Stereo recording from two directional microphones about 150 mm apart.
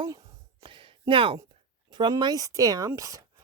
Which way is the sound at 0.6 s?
35° right (ahead or behind).